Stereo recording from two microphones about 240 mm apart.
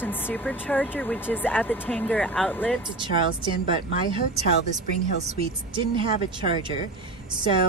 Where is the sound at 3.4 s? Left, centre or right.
Right.